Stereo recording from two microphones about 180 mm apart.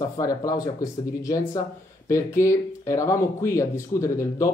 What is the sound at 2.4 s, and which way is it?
Speech, 15° left (ahead or behind).